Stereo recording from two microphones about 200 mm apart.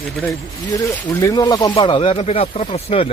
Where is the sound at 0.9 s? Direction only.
15° left (ahead or behind).